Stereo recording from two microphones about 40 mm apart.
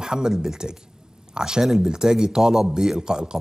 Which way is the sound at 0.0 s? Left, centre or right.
Centre.